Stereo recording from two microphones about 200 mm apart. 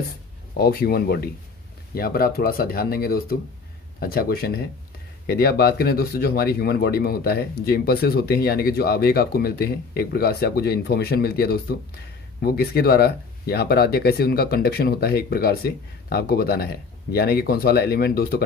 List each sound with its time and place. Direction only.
0.6 s speech: 50° left (ahead or behind)